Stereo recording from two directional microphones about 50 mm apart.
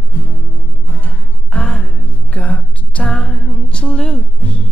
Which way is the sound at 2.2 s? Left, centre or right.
Left.